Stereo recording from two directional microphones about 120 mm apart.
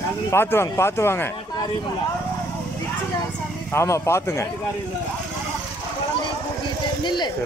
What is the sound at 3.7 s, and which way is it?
Speech, 20° left (ahead or behind).